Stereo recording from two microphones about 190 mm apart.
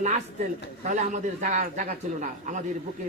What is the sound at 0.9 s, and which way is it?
A man's voice, 40° right (ahead or behind).